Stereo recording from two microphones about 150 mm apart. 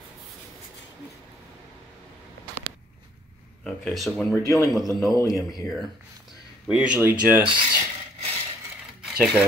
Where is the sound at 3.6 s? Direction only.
Centre (ahead or behind).